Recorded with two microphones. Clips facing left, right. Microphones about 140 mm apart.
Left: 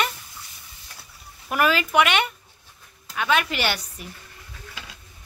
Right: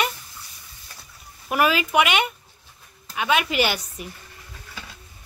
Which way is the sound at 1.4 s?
5° right (ahead or behind).